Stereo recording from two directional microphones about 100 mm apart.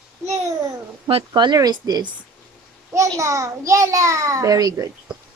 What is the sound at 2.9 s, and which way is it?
A child's voice, 30° right (ahead or behind).